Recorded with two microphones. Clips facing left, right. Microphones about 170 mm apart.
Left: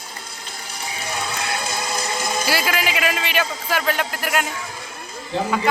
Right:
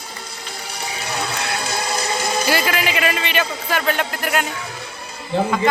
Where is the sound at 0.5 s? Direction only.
50° left (ahead or behind).